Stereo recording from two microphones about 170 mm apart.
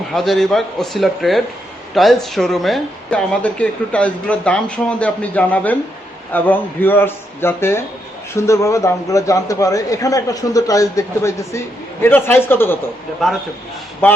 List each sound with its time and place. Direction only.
0.1 s a man's voice: centre (ahead or behind)
13.2 s a man's voice: centre (ahead or behind)
14.0 s a woman's voice: 10° left (ahead or behind)